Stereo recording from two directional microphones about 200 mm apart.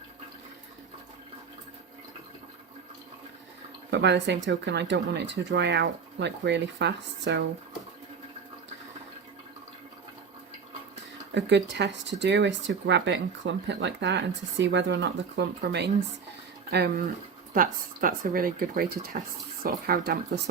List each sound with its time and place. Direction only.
3.9 s speech: 60° right (ahead or behind)
11.3 s speech: 60° right (ahead or behind)
17.5 s speech: 45° right (ahead or behind)